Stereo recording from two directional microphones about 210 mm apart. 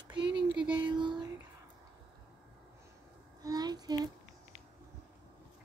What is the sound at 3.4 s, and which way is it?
Child singing, 20° right (ahead or behind).